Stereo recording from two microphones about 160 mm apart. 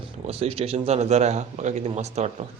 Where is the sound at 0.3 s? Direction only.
40° right (ahead or behind).